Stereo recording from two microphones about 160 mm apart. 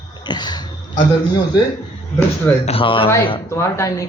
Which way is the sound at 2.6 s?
35° left (ahead or behind).